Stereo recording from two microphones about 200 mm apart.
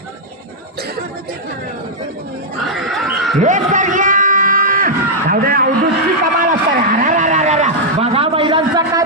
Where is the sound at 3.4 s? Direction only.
40° right (ahead or behind).